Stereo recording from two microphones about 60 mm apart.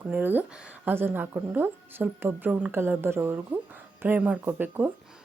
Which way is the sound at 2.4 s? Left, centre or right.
Right.